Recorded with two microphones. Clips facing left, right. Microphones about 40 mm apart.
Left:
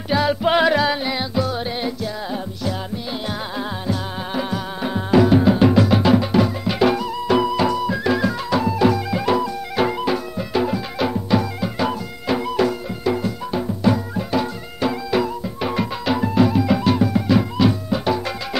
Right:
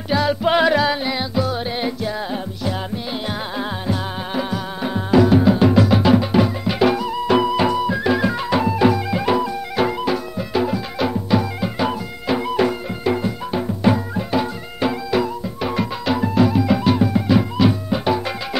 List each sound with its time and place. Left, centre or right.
0.1 s music: centre
3.3 s music: centre
4.4 s music: centre
7.1 s music: centre
9.8 s music: centre
11.6 s music: centre
15.0 s music: centre